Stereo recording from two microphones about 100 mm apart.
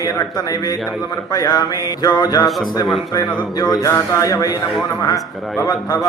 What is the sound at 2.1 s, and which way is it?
Music, 45° left (ahead or behind).